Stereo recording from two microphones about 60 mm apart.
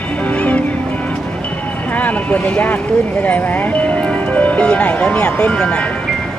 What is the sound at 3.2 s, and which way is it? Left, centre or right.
Speech, left.